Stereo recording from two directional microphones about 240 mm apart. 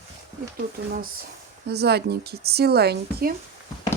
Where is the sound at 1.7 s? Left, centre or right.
Right.